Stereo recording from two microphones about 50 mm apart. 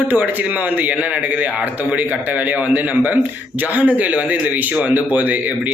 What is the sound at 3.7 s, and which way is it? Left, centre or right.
A man's voice, right.